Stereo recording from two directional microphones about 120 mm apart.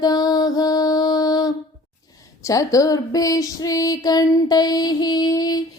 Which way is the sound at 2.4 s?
30° left (ahead or behind).